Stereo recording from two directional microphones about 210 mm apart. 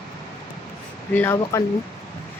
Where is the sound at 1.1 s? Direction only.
10° left (ahead or behind).